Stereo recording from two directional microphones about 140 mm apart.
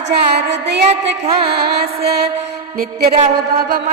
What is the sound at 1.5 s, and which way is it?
Music, 90° right.